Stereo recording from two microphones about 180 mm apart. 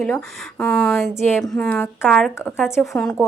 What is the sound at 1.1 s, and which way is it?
A woman's voice, 10° left (ahead or behind).